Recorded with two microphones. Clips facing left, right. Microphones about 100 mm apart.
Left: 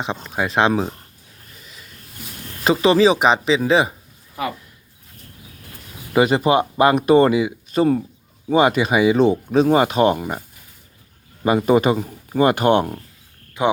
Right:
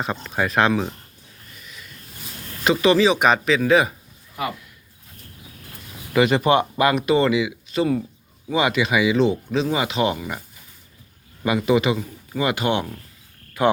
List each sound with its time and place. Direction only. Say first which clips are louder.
0.0 s speech: even; 20° left (ahead or behind)
0.7 s speech: left 2 dB; 35° left (ahead or behind)
1.6 s rub: right 2 dB; 30° left (ahead or behind)
2.6 s speech: left 2 dB; 30° left (ahead or behind)
6.1 s speech: left 1 dB; 30° left (ahead or behind)
6.9 s speech: left 6 dB; 45° left (ahead or behind)
11.4 s speech: left 3 dB; 40° left (ahead or behind)
13.6 s speech: even; 20° left (ahead or behind)